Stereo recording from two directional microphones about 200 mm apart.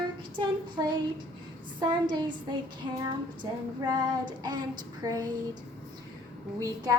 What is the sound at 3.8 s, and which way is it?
A woman's voice, 20° right (ahead or behind).